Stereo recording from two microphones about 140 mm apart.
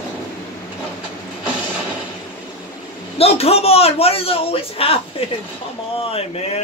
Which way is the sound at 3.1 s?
45° left (ahead or behind).